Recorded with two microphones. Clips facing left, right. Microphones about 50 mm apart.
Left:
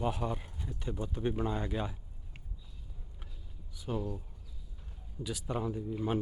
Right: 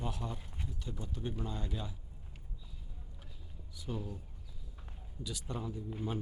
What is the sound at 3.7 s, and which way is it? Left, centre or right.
Speech, left.